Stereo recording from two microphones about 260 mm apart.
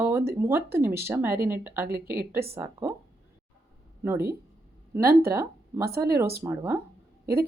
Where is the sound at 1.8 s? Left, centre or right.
Right.